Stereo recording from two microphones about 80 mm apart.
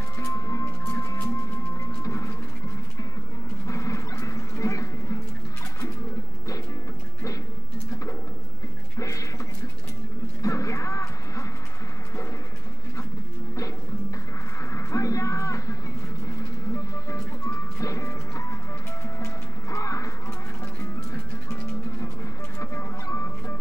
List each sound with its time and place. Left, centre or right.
0.2 s music: left
3.6 s dog: left
8.9 s music: left
10.4 s a sound: left
14.7 s a sound: left
16.3 s music: left
22.6 s music: left